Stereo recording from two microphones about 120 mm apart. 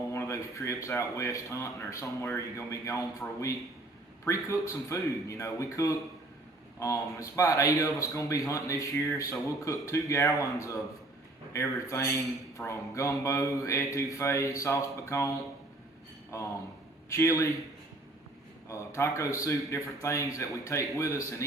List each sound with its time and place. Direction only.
0.1 s speech: 25° left (ahead or behind)
18.7 s speech: 25° left (ahead or behind)